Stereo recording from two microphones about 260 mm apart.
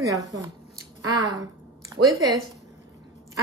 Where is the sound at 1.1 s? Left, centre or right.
Centre.